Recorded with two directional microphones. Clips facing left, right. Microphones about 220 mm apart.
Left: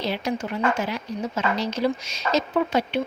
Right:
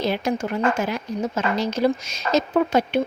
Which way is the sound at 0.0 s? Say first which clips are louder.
Right 3 dB; 50° right (ahead or behind).